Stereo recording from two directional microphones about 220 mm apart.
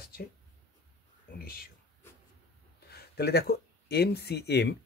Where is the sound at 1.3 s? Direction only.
45° left (ahead or behind).